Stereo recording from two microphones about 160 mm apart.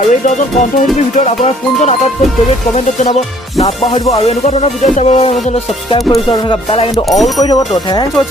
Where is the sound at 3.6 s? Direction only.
40° left (ahead or behind).